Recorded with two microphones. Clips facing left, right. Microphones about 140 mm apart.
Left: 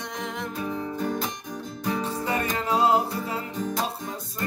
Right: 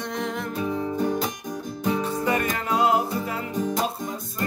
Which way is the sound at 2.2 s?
25° left (ahead or behind).